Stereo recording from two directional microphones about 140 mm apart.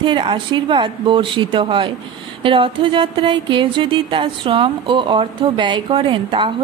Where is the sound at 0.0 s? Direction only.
35° right (ahead or behind).